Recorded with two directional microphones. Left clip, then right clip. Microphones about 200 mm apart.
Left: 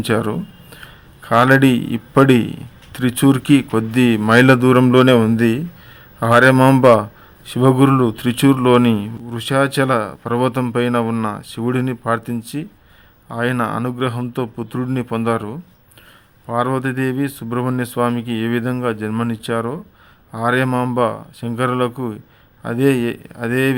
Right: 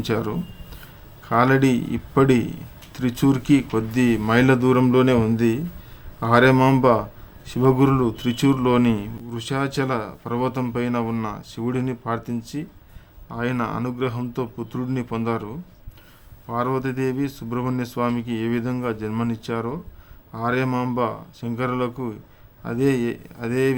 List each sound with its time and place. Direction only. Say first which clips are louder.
0.0 s a man's voice: left 6 dB; 20° left (ahead or behind)